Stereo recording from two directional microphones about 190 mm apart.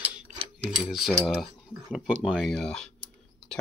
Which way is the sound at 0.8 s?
Centre (ahead or behind).